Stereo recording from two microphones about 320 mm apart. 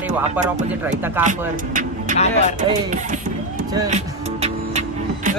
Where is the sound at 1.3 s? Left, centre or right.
Right.